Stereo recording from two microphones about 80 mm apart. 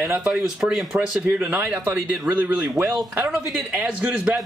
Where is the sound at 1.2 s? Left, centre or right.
Centre.